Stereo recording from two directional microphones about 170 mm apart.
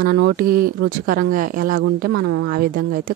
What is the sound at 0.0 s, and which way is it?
Speech, 80° right.